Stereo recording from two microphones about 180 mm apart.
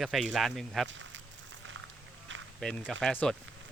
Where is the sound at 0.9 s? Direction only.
90° right.